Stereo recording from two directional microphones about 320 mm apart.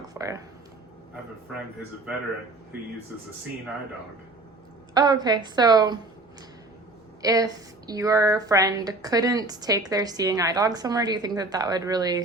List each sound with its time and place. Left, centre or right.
0.1 s a sound: centre
4.9 s speech: centre
7.2 s speech: centre